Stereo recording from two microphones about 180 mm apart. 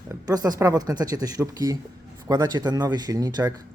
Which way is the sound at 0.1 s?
20° right (ahead or behind).